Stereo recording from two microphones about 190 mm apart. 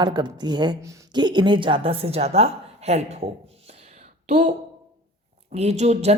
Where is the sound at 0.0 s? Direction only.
20° right (ahead or behind).